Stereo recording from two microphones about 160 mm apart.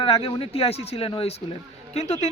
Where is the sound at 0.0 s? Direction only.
35° left (ahead or behind).